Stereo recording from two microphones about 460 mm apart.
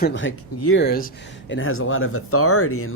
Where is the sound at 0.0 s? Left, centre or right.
Left.